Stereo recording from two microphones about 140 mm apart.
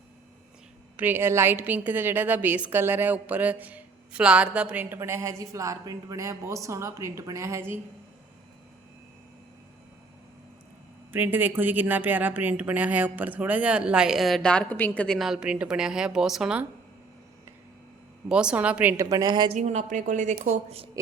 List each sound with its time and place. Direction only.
0.9 s speech: 15° right (ahead or behind)
11.1 s speech: 15° right (ahead or behind)
18.3 s speech: 5° right (ahead or behind)
18.9 s a woman's voice: 25° right (ahead or behind)
19.5 s a woman's voice: 55° right (ahead or behind)